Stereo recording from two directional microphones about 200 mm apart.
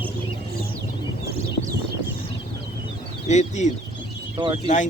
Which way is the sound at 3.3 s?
35° left (ahead or behind).